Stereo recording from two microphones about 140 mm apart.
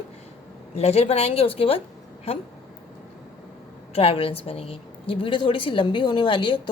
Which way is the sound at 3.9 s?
40° left (ahead or behind).